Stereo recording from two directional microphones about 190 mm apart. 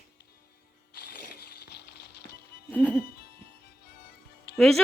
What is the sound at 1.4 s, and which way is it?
Music, 60° left (ahead or behind).